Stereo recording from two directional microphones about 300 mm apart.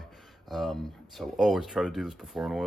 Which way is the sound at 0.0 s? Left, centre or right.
Centre.